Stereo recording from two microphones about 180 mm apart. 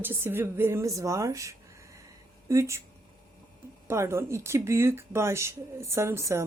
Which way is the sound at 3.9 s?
15° right (ahead or behind).